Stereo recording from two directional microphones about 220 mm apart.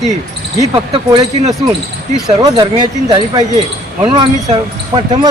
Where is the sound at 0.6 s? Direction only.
15° right (ahead or behind).